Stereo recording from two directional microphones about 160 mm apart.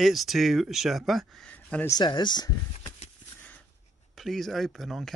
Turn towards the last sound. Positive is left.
turn(degrees=0)  # may be behind; listen again after turning